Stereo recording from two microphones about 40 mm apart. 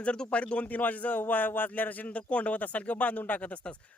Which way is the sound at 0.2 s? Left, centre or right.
Left.